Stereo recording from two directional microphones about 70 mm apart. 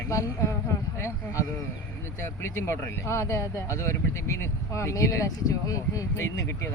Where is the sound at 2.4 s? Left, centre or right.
Left.